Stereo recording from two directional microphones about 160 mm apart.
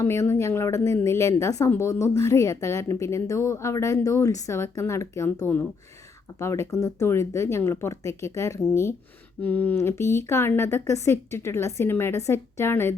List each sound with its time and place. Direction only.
0.0 s a woman's voice: 15° left (ahead or behind)